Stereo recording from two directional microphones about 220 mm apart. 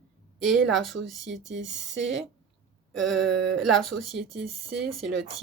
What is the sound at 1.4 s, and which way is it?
Speech, 55° right (ahead or behind).